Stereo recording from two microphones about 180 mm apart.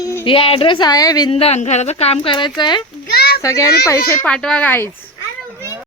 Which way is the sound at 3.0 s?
60° left (ahead or behind).